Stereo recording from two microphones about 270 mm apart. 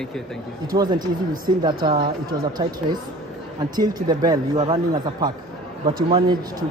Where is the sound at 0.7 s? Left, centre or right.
Centre.